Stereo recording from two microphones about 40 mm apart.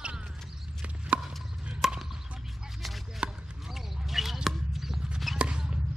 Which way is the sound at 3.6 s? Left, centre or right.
Centre.